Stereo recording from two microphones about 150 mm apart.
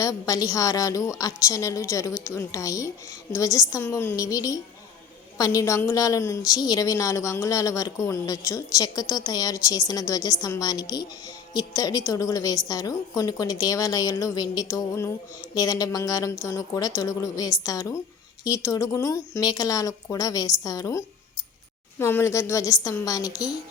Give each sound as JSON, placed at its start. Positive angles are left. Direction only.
{"t": 0.0, "sound": "a woman's voice", "side_deg": 25}